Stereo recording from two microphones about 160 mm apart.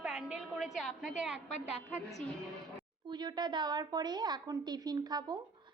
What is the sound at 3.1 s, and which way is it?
A woman's voice, 25° right (ahead or behind).